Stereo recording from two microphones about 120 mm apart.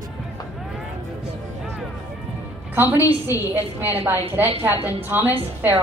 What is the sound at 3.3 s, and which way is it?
A woman's voice, 15° right (ahead or behind).